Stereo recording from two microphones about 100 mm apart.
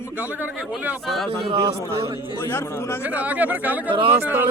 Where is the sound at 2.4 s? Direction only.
25° left (ahead or behind).